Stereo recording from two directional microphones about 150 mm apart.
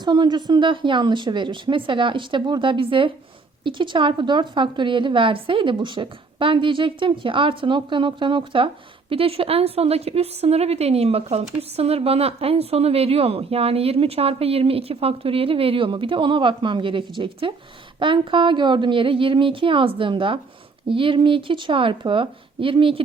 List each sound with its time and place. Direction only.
0.0 s a woman's voice: 30° right (ahead or behind)